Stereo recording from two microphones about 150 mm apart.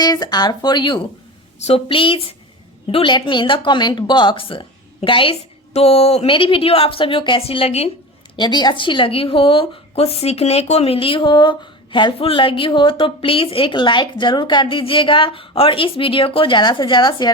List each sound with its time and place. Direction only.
0.0 s speech: 25° left (ahead or behind)
8.4 s speech: 30° left (ahead or behind)